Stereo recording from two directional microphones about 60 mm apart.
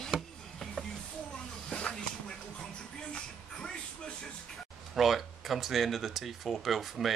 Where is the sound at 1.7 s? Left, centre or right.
Centre.